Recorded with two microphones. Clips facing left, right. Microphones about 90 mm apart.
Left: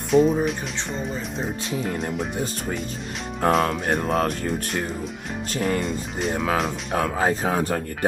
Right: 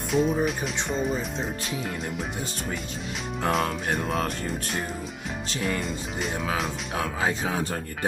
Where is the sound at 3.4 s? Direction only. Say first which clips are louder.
Left 5 dB; 45° left (ahead or behind).